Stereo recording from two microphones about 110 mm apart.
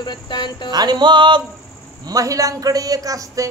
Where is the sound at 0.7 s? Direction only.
40° right (ahead or behind).